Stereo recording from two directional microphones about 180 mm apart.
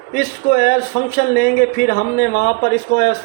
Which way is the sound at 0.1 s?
55° left (ahead or behind).